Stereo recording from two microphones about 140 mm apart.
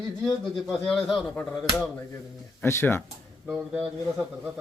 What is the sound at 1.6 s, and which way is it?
Speech, centre (ahead or behind).